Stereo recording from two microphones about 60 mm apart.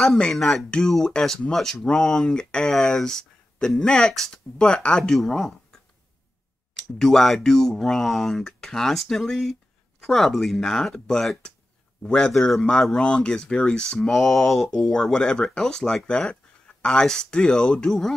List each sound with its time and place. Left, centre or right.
0.3 s speech: centre
7.0 s speech: centre